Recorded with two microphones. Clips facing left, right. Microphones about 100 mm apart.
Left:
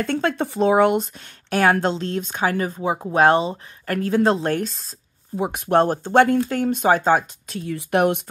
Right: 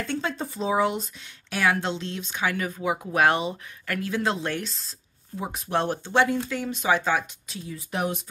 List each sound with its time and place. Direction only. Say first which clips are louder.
0.0 s speech: left 7 dB; 55° left (ahead or behind)
5.4 s speech: left 9 dB; 70° left (ahead or behind)
5.8 s speech: left 7 dB; 45° left (ahead or behind); by 8.2 s 65° left (ahead or behind)